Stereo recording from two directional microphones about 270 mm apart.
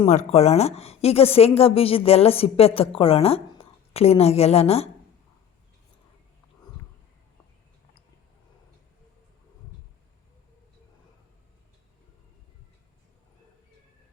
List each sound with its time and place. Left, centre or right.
0.0 s a woman's voice: left